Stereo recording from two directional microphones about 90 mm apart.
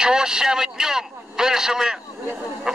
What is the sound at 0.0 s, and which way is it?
A man's voice, 10° right (ahead or behind).